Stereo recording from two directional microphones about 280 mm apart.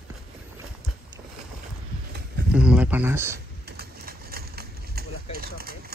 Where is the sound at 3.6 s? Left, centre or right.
Right.